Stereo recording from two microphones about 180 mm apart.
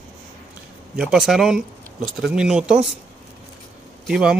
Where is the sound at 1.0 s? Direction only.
5° right (ahead or behind).